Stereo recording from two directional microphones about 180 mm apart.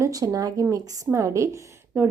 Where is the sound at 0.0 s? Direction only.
20° right (ahead or behind).